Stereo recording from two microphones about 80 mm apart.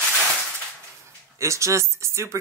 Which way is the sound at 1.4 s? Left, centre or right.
Right.